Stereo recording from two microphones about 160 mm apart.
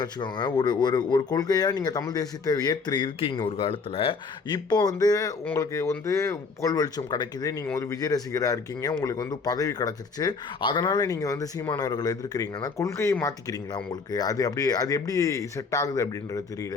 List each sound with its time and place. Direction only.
0.0 s speech: 25° left (ahead or behind)